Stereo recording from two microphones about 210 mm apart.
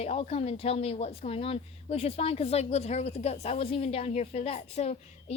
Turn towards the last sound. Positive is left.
turn(degrees=30)  # may be behind; listen again after turning